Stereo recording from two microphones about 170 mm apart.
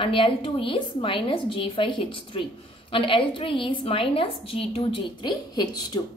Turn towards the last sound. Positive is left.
turn(degrees=25)  # may be behind; listen again after turning